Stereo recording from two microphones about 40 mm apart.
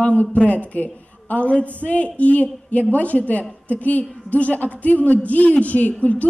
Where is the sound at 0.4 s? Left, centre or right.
Left.